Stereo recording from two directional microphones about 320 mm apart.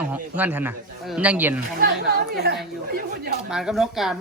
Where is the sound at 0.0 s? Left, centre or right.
Centre.